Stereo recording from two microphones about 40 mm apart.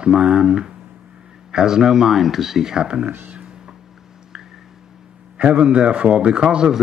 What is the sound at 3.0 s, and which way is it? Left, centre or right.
Speech, right.